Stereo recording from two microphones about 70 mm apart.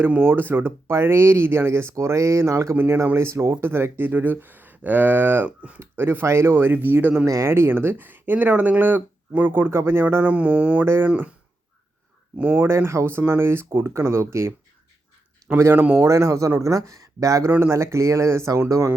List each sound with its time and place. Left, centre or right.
0.1 s speech: right
5.5 s speech: centre
5.8 s speech: right
7.3 s speech: right
10.3 s speech: centre
12.4 s speech: right
12.6 s speech: right
15.4 s speech: right
16.0 s speech: right
17.5 s speech: right